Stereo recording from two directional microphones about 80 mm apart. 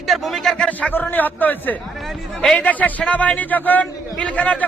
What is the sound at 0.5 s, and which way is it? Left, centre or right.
A man's voice, centre.